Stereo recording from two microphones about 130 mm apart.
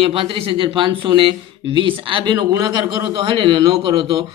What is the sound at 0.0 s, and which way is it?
Speech, 45° right (ahead or behind).